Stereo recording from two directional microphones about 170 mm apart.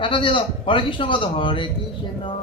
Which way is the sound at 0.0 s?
30° left (ahead or behind).